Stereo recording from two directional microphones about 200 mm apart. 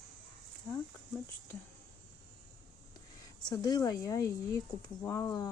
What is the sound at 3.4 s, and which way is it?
Speech, 20° left (ahead or behind).